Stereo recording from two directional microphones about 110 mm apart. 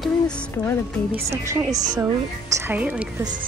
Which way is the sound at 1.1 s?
25° right (ahead or behind).